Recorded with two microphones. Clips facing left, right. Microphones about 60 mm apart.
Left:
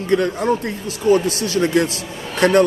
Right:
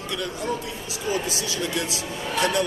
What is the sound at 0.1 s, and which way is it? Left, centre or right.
Speech, left.